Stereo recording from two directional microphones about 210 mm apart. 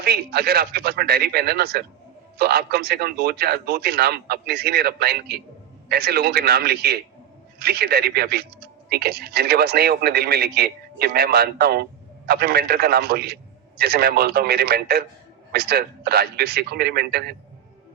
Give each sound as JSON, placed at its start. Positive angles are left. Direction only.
{"t": 0.0, "sound": "a man's voice", "side_deg": -50}